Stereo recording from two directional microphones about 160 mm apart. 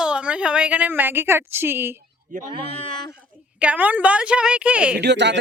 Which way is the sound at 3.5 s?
10° right (ahead or behind).